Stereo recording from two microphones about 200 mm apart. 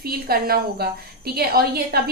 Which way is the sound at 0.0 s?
50° right (ahead or behind).